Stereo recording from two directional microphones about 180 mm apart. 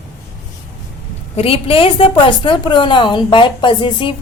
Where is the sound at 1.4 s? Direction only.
30° left (ahead or behind).